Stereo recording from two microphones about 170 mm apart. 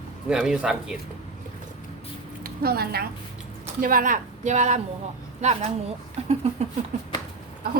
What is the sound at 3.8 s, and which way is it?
Speech, 55° right (ahead or behind).